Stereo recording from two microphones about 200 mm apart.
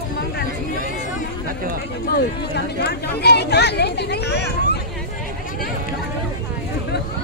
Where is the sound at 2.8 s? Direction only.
55° left (ahead or behind).